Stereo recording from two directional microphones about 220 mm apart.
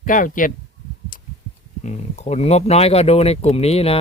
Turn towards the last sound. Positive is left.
turn(degrees=25)  # may be behind; listen again after turning